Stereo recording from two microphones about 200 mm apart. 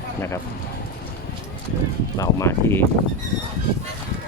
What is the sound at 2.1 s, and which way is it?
Speech, 15° left (ahead or behind).